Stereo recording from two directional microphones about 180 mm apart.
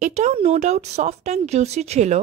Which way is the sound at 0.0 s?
40° right (ahead or behind).